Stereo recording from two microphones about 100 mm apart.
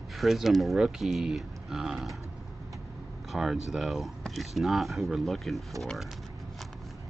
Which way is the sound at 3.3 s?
5° right (ahead or behind).